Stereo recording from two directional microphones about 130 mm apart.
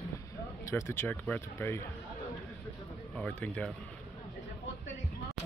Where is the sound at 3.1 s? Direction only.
10° left (ahead or behind).